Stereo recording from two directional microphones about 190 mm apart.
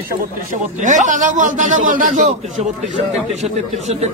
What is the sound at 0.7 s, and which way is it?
A man's voice, 40° right (ahead or behind).